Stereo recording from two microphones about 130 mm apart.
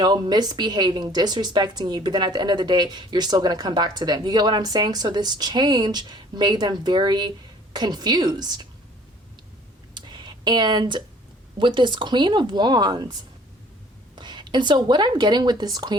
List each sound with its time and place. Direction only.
0.0 s a woman's voice: 35° right (ahead or behind)
9.9 s a sound: 35° right (ahead or behind)
11.5 s a woman's voice: 40° right (ahead or behind)
14.2 s speech: 35° right (ahead or behind)